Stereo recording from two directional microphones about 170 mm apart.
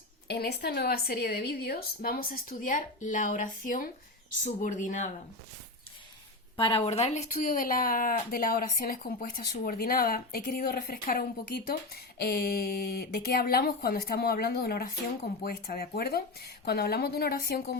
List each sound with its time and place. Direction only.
0.3 s speech: 75° left (ahead or behind); by 5.1 s 45° left (ahead or behind)
6.6 s speech: 35° left (ahead or behind); by 17.7 s 65° left (ahead or behind)